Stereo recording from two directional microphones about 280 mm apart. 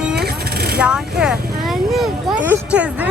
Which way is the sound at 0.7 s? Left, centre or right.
Centre.